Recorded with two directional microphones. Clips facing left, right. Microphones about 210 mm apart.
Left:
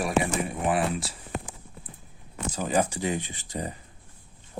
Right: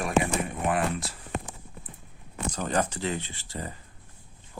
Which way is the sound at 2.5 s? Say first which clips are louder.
Left 2 dB; 5° left (ahead or behind).